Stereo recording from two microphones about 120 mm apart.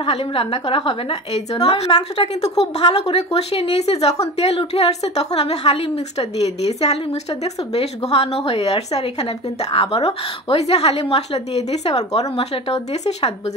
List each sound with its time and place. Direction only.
0.0 s a woman's voice: 50° left (ahead or behind)